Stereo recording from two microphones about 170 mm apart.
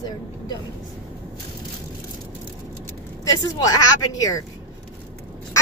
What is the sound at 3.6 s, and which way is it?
Speech, 20° left (ahead or behind).